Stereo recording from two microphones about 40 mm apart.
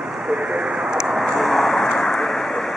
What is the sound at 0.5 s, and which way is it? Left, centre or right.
Vehicle, centre.